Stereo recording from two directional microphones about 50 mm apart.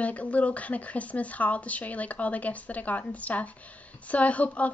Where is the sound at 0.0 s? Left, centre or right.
Left.